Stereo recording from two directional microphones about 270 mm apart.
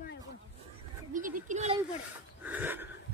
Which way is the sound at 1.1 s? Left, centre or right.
Right.